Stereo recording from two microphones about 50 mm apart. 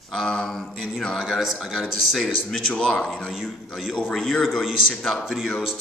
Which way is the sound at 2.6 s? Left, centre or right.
Centre.